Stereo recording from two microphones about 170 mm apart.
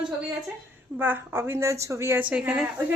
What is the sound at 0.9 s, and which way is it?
A woman's voice, 10° right (ahead or behind).